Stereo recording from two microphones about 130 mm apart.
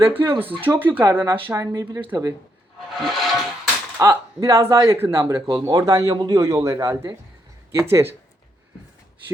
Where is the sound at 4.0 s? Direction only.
25° right (ahead or behind).